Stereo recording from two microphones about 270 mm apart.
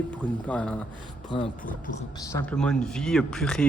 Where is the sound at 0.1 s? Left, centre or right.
Centre.